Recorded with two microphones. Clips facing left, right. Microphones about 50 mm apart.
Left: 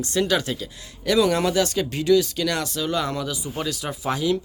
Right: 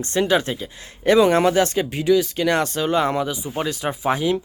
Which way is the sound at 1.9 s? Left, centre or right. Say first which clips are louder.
Even; centre.